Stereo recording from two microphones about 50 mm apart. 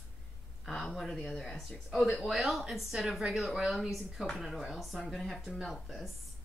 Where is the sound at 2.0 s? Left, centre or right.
Centre.